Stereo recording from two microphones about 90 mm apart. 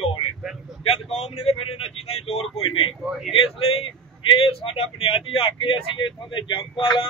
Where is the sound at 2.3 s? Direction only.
85° left.